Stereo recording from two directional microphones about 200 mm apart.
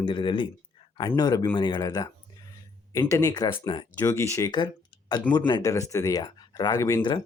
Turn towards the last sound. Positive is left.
turn(degrees=25)  # may be behind; listen again after turning